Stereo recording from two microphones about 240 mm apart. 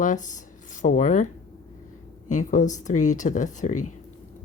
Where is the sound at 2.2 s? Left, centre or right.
Left.